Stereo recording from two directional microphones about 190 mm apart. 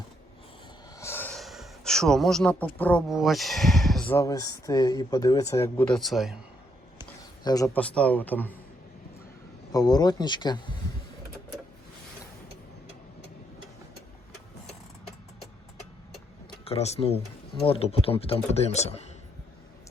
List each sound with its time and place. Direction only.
0.9 s gasp: 15° left (ahead or behind)
3.1 s speech: centre (ahead or behind)
7.4 s speech: 20° left (ahead or behind)
9.7 s speech: 20° left (ahead or behind)
16.6 s speech: 35° left (ahead or behind)